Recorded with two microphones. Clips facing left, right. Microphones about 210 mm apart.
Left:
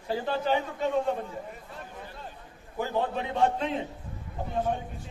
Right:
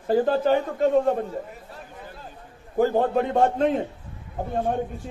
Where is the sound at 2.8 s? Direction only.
50° right (ahead or behind).